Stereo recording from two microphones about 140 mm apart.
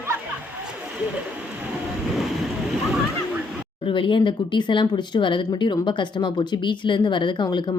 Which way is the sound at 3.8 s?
35° left (ahead or behind).